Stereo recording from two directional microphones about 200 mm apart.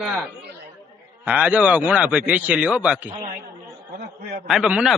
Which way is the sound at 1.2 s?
5° right (ahead or behind).